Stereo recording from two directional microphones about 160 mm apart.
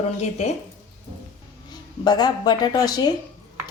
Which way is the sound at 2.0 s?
25° left (ahead or behind).